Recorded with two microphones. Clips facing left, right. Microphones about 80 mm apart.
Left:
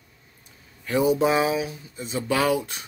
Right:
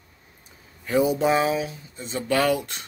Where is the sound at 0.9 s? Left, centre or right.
Centre.